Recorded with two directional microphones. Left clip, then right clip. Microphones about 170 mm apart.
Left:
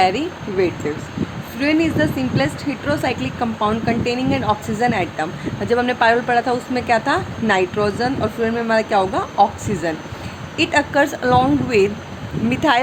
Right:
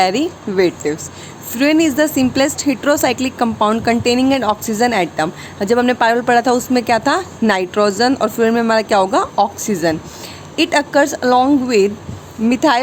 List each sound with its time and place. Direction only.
0.0 s speech: 45° right (ahead or behind)